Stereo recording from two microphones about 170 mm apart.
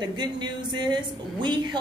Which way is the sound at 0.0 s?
25° right (ahead or behind).